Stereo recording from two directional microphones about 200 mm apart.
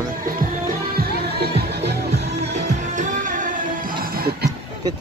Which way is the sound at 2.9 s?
40° right (ahead or behind).